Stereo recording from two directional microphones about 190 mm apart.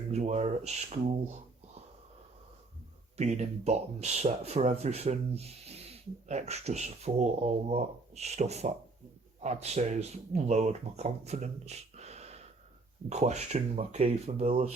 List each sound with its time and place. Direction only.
0.1 s speech: 35° right (ahead or behind)
3.2 s speech: 35° right (ahead or behind)